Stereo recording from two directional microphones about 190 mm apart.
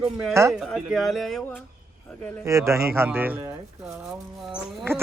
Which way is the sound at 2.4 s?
15° right (ahead or behind).